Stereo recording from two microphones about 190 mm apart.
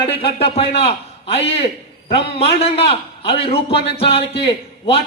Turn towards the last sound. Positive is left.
turn(degrees=30)  # may be behind; listen again after turning